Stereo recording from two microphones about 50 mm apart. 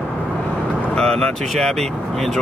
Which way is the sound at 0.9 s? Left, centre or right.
Centre.